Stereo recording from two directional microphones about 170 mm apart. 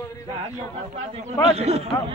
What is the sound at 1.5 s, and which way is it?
Speech, 40° right (ahead or behind).